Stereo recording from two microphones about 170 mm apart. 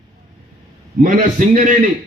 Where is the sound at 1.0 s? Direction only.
50° right (ahead or behind).